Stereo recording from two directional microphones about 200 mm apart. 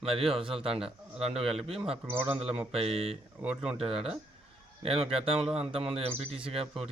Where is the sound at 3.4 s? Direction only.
5° right (ahead or behind).